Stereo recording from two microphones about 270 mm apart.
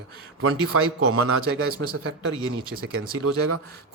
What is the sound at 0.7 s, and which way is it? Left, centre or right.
Speech, right.